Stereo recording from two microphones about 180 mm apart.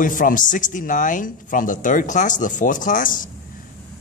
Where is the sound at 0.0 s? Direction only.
50° left (ahead or behind).